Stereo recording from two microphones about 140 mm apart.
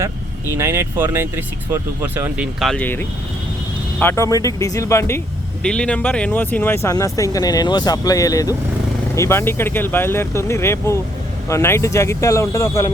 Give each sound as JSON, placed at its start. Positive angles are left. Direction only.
{"t": 0.5, "sound": "speech", "side_deg": -20}
{"t": 2.6, "sound": "speech", "side_deg": 0}
{"t": 2.8, "sound": "speech", "side_deg": 15}
{"t": 5.6, "sound": "speech", "side_deg": 5}